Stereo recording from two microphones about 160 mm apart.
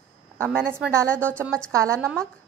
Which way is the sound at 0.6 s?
15° right (ahead or behind).